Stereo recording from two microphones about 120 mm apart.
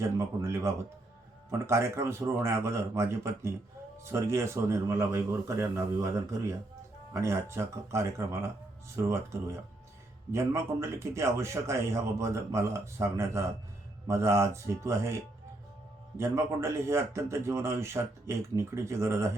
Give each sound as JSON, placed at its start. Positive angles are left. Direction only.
{"t": 0.0, "sound": "a man's voice", "side_deg": -25}